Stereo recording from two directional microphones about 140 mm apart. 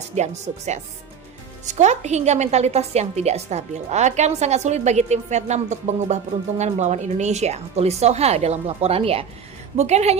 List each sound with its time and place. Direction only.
0.2 s a woman's voice: 55° right (ahead or behind)